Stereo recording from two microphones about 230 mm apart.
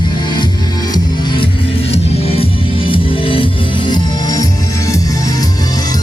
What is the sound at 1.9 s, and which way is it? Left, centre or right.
Music, left.